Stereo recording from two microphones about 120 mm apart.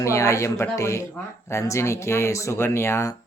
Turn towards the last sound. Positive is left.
turn(degrees=20)  # may be behind; listen again after turning